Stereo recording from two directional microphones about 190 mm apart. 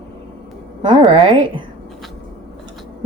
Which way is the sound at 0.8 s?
30° right (ahead or behind).